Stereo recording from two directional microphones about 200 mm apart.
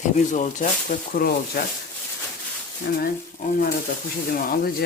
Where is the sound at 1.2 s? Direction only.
50° left (ahead or behind).